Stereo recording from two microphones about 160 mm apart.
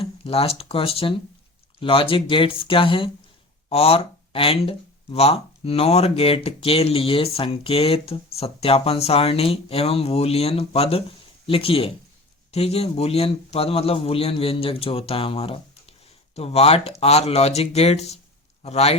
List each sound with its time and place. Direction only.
0.0 s speech: 40° left (ahead or behind)